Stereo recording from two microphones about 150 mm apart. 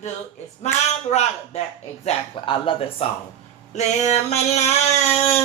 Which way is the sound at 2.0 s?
40° left (ahead or behind).